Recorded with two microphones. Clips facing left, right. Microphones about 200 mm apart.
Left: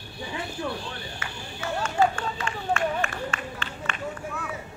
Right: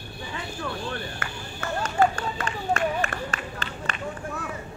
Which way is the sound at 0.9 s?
55° right (ahead or behind).